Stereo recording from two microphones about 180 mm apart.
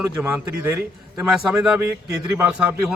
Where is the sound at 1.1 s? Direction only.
Centre (ahead or behind).